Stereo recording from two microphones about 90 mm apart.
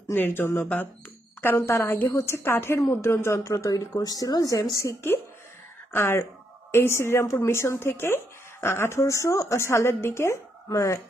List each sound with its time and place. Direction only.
0.1 s a woman's voice: 25° left (ahead or behind)